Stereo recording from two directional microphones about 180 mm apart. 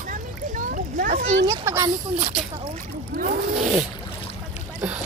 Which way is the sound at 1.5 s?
15° right (ahead or behind).